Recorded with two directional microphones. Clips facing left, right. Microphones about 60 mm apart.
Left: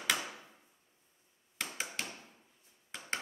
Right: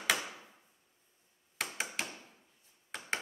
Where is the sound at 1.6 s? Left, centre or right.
Centre.